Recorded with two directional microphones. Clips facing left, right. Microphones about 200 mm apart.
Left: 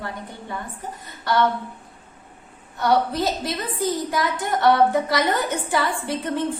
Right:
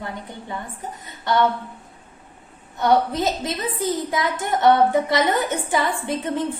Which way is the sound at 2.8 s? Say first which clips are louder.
Right 1 dB; 20° right (ahead or behind).